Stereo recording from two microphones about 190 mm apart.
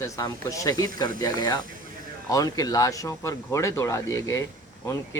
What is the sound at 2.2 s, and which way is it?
Speech, 20° left (ahead or behind).